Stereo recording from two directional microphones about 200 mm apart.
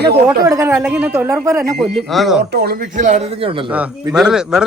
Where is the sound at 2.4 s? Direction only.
50° right (ahead or behind); by 3.7 s 25° right (ahead or behind).